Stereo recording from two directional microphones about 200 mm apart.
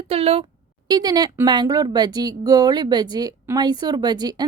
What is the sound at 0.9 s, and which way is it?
Speech, 20° right (ahead or behind).